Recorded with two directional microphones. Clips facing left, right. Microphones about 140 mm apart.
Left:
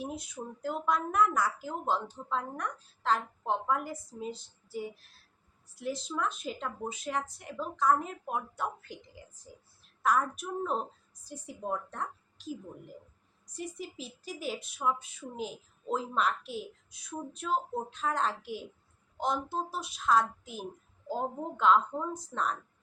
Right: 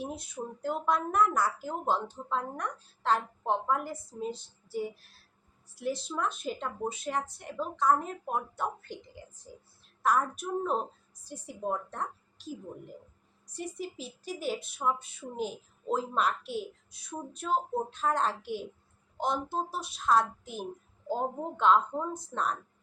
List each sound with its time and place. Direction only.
0.0 s speech: centre (ahead or behind)
6.0 s speech: 5° right (ahead or behind)
10.0 s speech: 5° right (ahead or behind)
11.9 s a sound: centre (ahead or behind)
13.7 s speech: centre (ahead or behind)
22.1 s a woman's voice: 25° right (ahead or behind)